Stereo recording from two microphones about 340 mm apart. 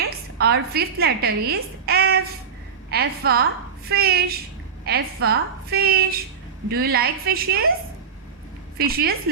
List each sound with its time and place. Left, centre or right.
0.0 s a woman's voice: right
8.8 s a woman's voice: right